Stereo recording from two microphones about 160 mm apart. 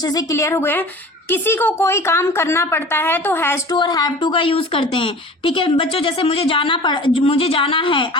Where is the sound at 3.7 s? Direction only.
25° left (ahead or behind).